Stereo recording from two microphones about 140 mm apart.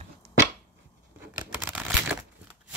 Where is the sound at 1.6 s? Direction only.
10° right (ahead or behind).